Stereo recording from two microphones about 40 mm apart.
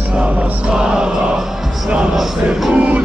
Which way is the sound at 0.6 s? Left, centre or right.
Right.